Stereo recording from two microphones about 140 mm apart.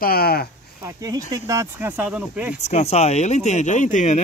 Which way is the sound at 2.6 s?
55° left (ahead or behind).